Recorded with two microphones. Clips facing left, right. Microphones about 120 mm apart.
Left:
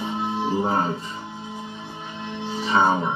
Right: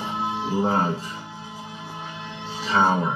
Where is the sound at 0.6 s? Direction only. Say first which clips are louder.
Right 3 dB; 40° right (ahead or behind).